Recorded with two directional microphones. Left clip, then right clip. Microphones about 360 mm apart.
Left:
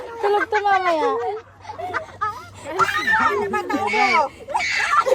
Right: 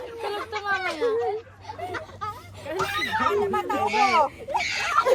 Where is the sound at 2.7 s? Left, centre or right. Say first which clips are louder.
Left 8 dB; left.